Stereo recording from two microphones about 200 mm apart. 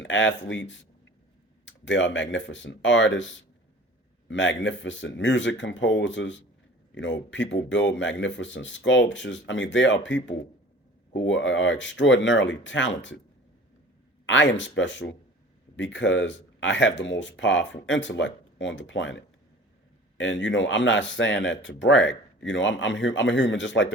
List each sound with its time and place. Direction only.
0.0 s speech: 65° left (ahead or behind)
14.3 s speech: 65° left (ahead or behind)